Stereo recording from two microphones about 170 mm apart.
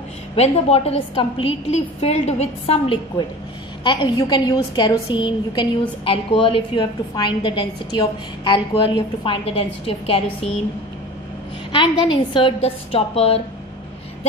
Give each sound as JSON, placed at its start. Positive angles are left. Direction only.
{"t": 0.4, "sound": "a woman's voice", "side_deg": 35}
{"t": 11.7, "sound": "a woman's voice", "side_deg": 30}